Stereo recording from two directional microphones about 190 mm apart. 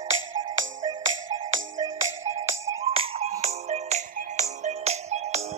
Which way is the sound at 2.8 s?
30° right (ahead or behind).